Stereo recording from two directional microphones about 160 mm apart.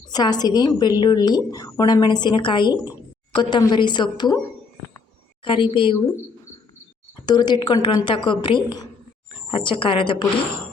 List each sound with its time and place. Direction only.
0.1 s a woman's voice: 25° left (ahead or behind)
5.4 s speech: 30° left (ahead or behind)
7.3 s a woman's voice: 25° left (ahead or behind)